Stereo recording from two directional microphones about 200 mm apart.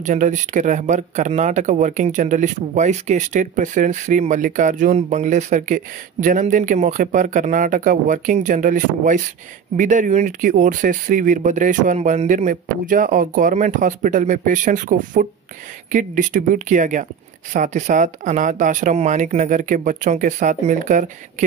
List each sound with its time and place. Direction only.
0.0 s speech: 40° right (ahead or behind)